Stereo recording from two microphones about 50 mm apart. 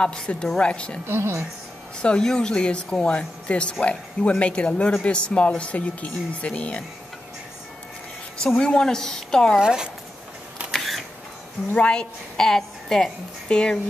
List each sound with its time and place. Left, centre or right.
0.0 s a woman's voice: centre
1.0 s speech: right
2.0 s speech: centre
8.4 s a woman's voice: centre
9.6 s speech: centre
10.7 s a sound: centre
11.7 s a woman's voice: left